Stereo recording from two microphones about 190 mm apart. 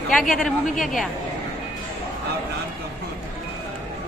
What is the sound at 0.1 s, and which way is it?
Speech, centre (ahead or behind).